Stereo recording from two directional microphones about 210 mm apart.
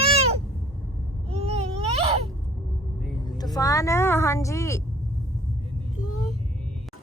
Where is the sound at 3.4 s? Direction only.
15° left (ahead or behind).